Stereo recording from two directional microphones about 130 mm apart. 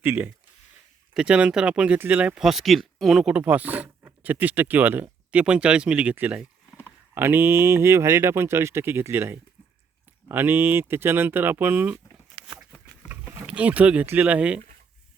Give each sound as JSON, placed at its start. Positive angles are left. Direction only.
{"t": 0.0, "sound": "speech", "side_deg": -15}
{"t": 12.4, "sound": "a sound", "side_deg": -45}
{"t": 13.1, "sound": "speech", "side_deg": -10}